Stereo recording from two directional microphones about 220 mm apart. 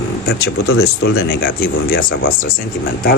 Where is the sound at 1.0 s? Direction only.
45° left (ahead or behind).